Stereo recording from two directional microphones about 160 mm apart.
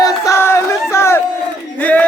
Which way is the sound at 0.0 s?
20° left (ahead or behind).